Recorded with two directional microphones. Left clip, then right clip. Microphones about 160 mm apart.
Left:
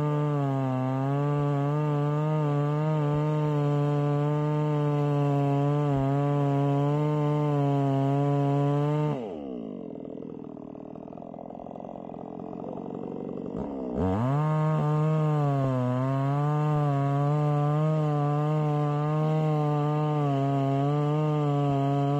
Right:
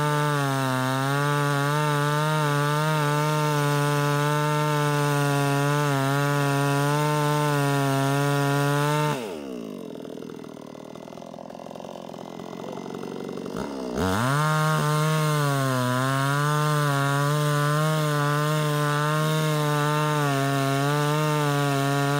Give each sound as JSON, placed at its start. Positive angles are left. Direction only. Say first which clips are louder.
{"t": 0.0, "sound": "chainsaw", "louder": "right 5 dB", "side_deg": -50}
{"t": 3.2, "sound": "chainsaw", "louder": "right 5 dB", "side_deg": -35}
{"t": 3.4, "sound": "chainsaw", "louder": "right 5 dB", "side_deg": -50}
{"t": 6.9, "sound": "chainsaw", "louder": "right 5 dB", "side_deg": -35}
{"t": 7.2, "sound": "chainsaw", "louder": "right 4 dB", "side_deg": -50}
{"t": 7.7, "sound": "chainsaw", "louder": "right 3 dB", "side_deg": -40}
{"t": 13.6, "sound": "chainsaw", "louder": "right 3 dB", "side_deg": -40}